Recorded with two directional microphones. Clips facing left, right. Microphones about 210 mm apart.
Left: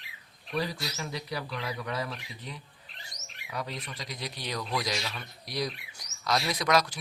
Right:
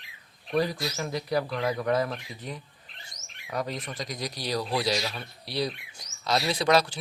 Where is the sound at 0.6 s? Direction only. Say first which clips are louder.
Right 6 dB; 50° right (ahead or behind).